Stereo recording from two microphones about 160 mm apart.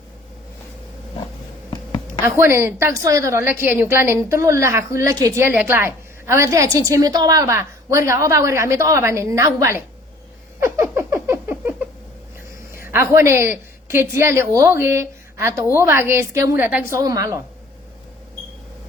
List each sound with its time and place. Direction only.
2.2 s a woman's voice: 15° right (ahead or behind)
10.6 s a sound: 15° right (ahead or behind)
12.7 s a woman's voice: 15° right (ahead or behind)